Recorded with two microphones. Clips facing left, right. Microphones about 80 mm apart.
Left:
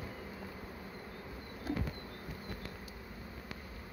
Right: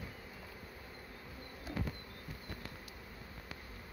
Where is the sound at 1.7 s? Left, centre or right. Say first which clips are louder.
Left 4 dB; left.